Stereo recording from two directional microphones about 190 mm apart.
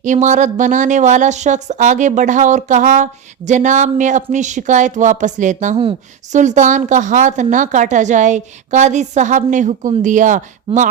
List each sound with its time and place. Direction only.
0.0 s speech: 40° right (ahead or behind)
10.7 s speech: 30° right (ahead or behind)